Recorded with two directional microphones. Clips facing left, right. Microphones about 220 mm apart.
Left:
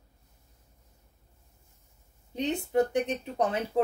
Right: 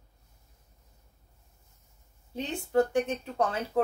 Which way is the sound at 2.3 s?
20° left (ahead or behind).